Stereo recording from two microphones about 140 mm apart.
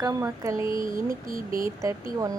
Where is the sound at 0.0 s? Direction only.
30° right (ahead or behind).